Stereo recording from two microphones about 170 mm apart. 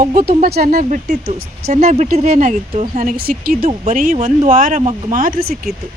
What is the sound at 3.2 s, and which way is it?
Speech, 60° right (ahead or behind).